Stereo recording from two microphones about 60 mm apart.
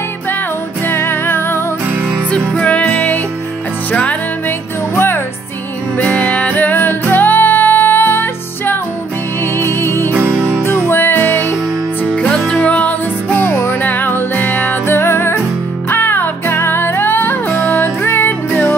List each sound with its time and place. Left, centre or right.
0.8 s music: left
2.3 s music: centre
4.9 s music: left
6.0 s music: left
12.6 s music: left